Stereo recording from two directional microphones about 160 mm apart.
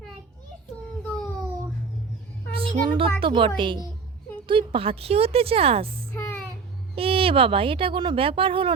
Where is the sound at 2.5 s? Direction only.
35° right (ahead or behind).